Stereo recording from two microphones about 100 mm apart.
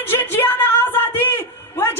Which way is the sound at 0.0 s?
20° left (ahead or behind).